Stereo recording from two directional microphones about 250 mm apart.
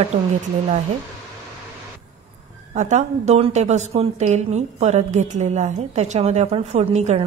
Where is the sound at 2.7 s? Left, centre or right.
Right.